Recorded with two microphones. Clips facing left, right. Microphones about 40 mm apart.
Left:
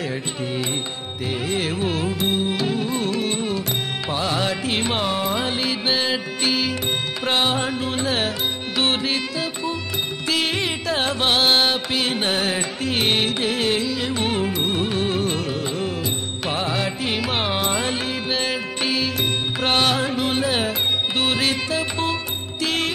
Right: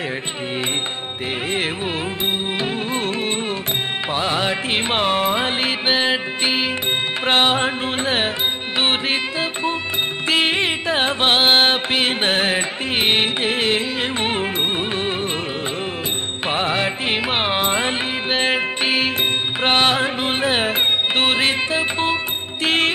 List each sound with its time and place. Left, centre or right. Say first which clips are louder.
1.5 s music: left 1 dB; right
7.2 s music: right 4 dB; right
16.4 s music: right 4 dB; right